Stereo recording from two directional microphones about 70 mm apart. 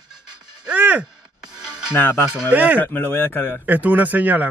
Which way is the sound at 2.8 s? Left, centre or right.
Left.